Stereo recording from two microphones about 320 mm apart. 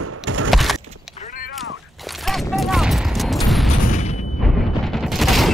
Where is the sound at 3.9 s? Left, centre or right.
Left.